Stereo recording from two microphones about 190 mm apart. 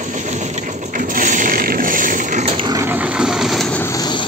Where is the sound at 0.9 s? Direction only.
45° right (ahead or behind).